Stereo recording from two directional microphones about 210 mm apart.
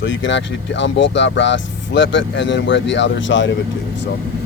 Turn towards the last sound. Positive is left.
turn(degrees=60)  # may be behind; listen again after turning